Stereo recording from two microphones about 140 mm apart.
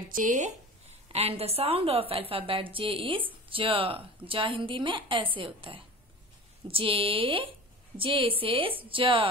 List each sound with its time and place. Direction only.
0.1 s speech: 65° right (ahead or behind)
1.1 s a woman's voice: 45° right (ahead or behind)